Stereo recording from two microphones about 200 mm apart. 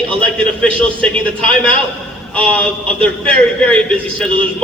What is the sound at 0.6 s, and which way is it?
Speech, 5° left (ahead or behind).